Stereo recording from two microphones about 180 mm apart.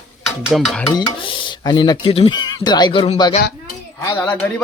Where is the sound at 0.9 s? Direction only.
30° left (ahead or behind).